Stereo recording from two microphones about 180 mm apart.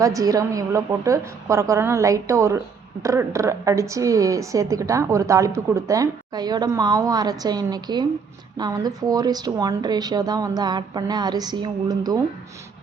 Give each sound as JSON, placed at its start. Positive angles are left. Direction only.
{"t": 0.0, "sound": "a woman's voice", "side_deg": -20}